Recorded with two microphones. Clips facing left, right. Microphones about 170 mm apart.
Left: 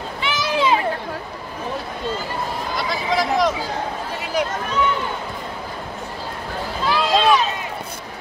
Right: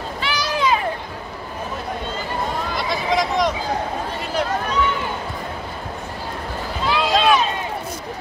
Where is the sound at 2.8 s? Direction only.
Centre (ahead or behind).